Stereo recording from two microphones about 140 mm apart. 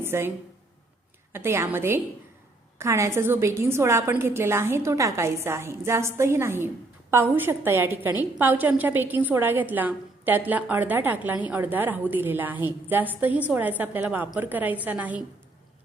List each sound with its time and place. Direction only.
0.0 s a woman's voice: 15° right (ahead or behind)